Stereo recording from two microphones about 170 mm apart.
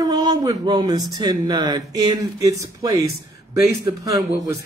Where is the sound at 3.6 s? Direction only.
20° right (ahead or behind).